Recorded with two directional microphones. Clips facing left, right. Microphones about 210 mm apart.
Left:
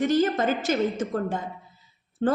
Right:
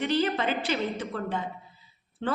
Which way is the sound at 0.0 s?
45° left (ahead or behind).